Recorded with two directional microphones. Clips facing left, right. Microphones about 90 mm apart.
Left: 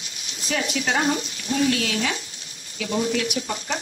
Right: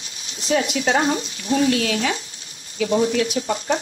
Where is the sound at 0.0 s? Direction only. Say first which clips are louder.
Right 1 dB; 30° right (ahead or behind).